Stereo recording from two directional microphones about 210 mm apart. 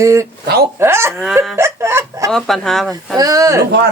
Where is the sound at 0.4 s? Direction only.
50° right (ahead or behind).